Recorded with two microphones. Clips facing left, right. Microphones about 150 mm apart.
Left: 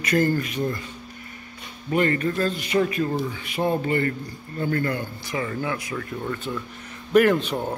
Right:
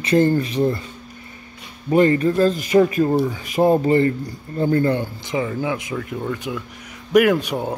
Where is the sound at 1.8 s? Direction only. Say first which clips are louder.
Right 7 dB; 30° right (ahead or behind).